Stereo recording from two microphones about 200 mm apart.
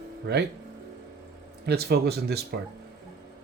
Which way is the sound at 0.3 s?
55° right (ahead or behind).